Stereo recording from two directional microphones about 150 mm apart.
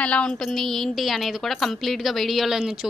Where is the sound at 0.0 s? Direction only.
5° left (ahead or behind).